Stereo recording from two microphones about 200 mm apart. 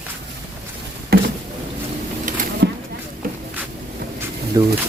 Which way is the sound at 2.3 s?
40° right (ahead or behind).